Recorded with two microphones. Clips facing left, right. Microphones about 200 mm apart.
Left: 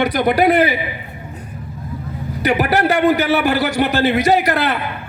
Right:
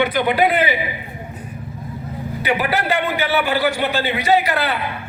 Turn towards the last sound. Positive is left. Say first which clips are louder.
# left 3 dB
turn(degrees=40)  # may be behind; listen again after turning